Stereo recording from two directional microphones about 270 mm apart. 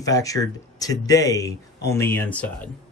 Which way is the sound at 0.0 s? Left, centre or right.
Centre.